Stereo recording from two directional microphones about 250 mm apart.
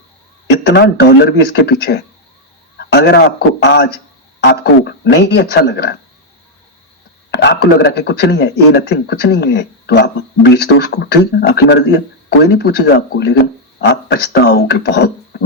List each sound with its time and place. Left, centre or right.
0.7 s a man's voice: left
7.3 s speech: left